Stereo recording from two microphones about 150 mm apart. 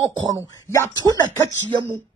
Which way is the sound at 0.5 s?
25° left (ahead or behind).